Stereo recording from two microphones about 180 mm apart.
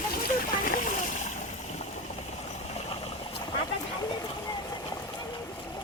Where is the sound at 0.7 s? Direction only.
45° left (ahead or behind); by 5.5 s 25° left (ahead or behind).